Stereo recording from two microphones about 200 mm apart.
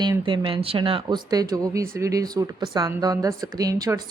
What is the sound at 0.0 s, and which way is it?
A woman's voice, 25° right (ahead or behind).